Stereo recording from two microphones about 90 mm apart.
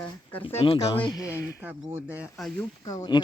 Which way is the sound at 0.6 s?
75° left (ahead or behind).